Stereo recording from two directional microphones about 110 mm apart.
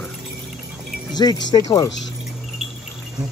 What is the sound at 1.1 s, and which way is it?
Speech, 40° left (ahead or behind).